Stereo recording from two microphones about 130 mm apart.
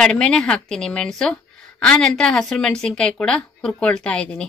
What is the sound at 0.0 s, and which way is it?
A woman's voice, 5° left (ahead or behind).